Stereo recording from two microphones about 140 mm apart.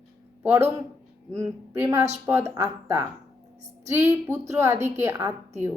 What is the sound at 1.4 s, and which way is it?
Speech, 20° right (ahead or behind).